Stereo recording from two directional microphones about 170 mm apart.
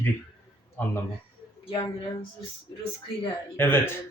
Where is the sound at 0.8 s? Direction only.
15° left (ahead or behind).